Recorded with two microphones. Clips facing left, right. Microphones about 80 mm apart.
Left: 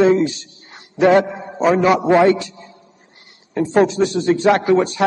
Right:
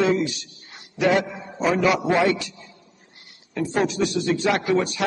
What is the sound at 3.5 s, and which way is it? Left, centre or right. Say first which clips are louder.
A man's voice: left 8 dB; left.